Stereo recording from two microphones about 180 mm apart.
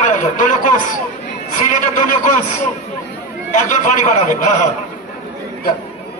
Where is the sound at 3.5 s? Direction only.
45° left (ahead or behind).